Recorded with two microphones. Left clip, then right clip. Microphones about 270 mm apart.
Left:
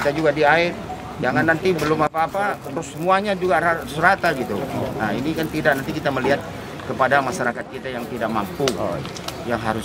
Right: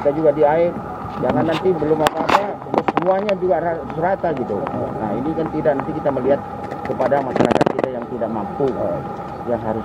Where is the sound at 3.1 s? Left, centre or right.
Left.